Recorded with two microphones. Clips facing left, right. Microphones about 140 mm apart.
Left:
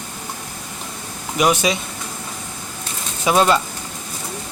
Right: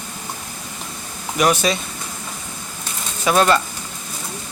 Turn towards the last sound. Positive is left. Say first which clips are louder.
# even
turn(degrees=15)  # may be behind; listen again after turning